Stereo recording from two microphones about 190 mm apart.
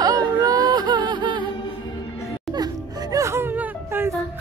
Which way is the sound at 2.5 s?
20° right (ahead or behind).